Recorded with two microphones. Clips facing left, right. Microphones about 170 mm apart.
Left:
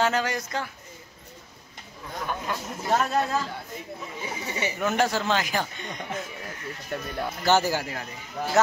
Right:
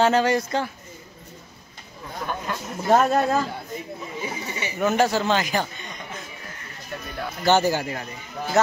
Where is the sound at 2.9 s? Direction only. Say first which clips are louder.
Right 5 dB; 50° right (ahead or behind).